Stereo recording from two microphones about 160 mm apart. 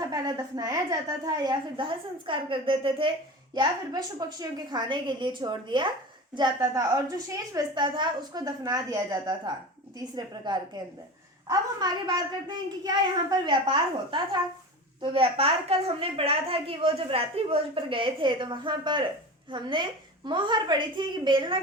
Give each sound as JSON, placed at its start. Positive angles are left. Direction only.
{"t": 0.0, "sound": "a woman's voice", "side_deg": -25}